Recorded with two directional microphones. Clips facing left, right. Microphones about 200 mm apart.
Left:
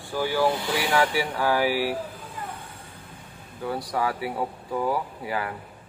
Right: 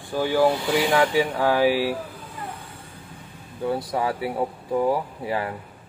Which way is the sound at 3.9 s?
25° right (ahead or behind).